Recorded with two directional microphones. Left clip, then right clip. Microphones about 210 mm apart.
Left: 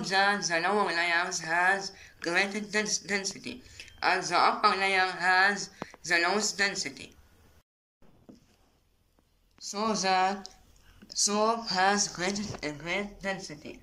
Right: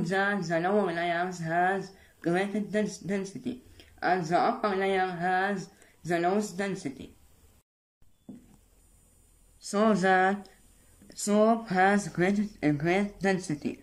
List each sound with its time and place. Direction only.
0.0 s speech: 40° right (ahead or behind)
9.7 s speech: 45° right (ahead or behind)
11.7 s speech: 35° right (ahead or behind)